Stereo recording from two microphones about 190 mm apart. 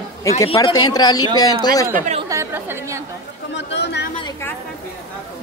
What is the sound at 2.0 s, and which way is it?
Speech, 40° right (ahead or behind).